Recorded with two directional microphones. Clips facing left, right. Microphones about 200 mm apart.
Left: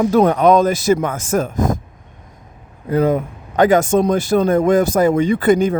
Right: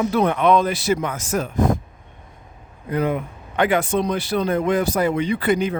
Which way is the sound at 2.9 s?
40° left (ahead or behind).